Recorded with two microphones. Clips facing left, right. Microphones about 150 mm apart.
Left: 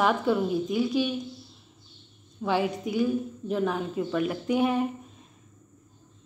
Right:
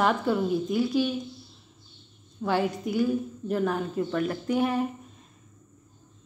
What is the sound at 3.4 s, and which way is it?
Speech, centre (ahead or behind).